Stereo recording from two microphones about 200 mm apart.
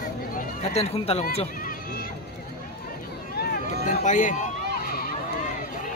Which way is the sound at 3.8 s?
40° left (ahead or behind).